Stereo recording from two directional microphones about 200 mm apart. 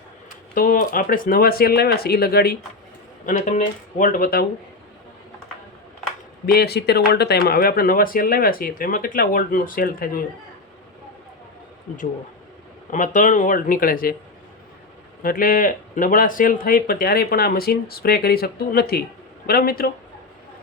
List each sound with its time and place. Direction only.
0.5 s a man's voice: 45° left (ahead or behind)
3.2 s speech: 35° left (ahead or behind)
6.4 s a man's voice: 50° left (ahead or behind)
12.9 s speech: 40° left (ahead or behind)
15.2 s a man's voice: 45° left (ahead or behind)